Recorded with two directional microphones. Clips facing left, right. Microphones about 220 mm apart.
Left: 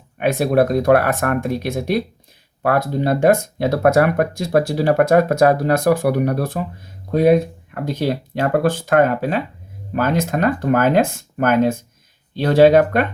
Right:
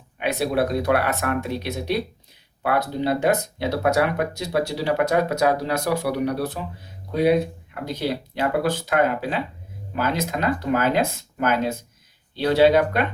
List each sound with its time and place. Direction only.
0.2 s speech: 50° left (ahead or behind)